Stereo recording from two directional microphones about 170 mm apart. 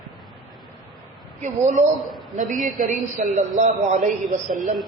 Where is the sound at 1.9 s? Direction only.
Centre (ahead or behind).